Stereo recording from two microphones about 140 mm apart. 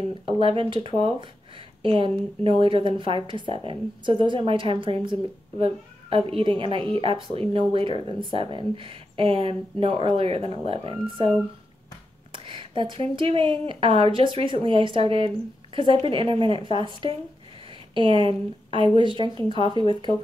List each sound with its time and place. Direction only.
0.4 s speech: 40° right (ahead or behind)